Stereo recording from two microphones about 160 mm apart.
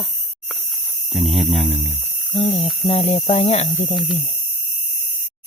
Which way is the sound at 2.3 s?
35° left (ahead or behind).